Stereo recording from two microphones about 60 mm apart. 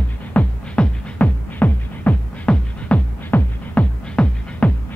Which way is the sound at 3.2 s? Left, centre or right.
Left.